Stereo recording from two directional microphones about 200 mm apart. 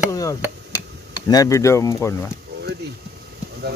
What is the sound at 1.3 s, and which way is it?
Speech, 15° left (ahead or behind).